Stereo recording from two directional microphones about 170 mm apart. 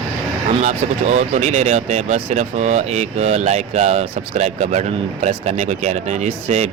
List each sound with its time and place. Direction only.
0.5 s speech: 45° right (ahead or behind)